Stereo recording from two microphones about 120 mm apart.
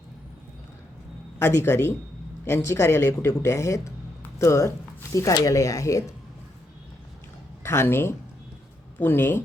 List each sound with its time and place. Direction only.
1.4 s speech: 20° left (ahead or behind)
7.6 s speech: 20° left (ahead or behind)